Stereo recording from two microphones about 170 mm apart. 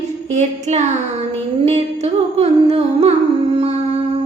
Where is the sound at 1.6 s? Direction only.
40° right (ahead or behind).